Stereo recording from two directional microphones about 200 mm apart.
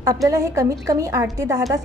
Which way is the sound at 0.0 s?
15° right (ahead or behind).